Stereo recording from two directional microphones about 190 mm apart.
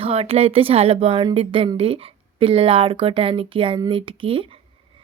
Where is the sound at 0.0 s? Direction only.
30° right (ahead or behind).